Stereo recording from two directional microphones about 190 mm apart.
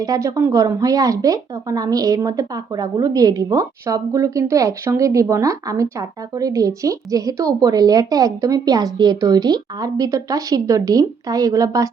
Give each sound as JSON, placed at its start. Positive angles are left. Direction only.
{"t": 0.0, "sound": "speech", "side_deg": -20}